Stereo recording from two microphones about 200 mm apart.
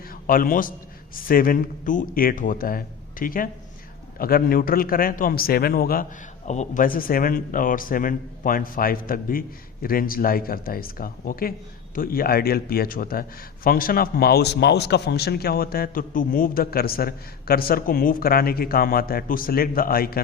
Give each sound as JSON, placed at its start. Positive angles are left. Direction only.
{"t": 0.1, "sound": "a man's voice", "side_deg": 45}